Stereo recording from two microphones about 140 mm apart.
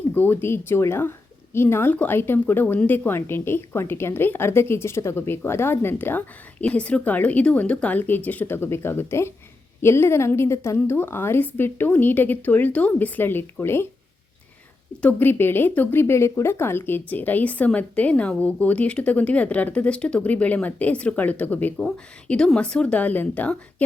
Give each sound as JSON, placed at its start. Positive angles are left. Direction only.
{"t": 0.1, "sound": "speech", "side_deg": 15}
{"t": 15.0, "sound": "speech", "side_deg": 15}